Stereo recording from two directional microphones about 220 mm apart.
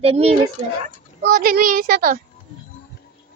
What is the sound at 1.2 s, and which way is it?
Speech, 40° right (ahead or behind).